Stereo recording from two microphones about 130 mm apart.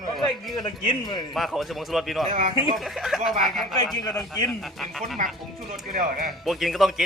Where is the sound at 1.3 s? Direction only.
Centre (ahead or behind).